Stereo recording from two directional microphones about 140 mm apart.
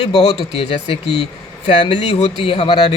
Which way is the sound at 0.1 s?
45° left (ahead or behind).